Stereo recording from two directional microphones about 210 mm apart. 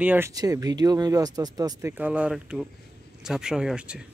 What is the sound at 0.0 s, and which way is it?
Speech, 10° right (ahead or behind).